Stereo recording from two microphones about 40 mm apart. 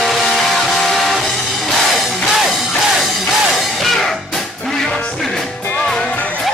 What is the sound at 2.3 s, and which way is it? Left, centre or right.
Music, centre.